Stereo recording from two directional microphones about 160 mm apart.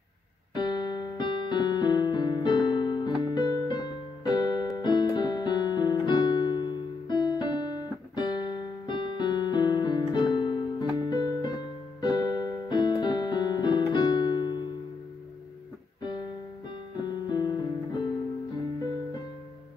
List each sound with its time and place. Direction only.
0.6 s music: 25° left (ahead or behind)
16.0 s music: 30° left (ahead or behind)